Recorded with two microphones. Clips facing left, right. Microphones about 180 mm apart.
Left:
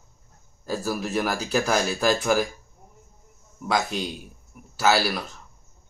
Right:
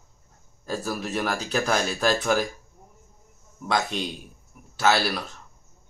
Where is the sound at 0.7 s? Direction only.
5° left (ahead or behind).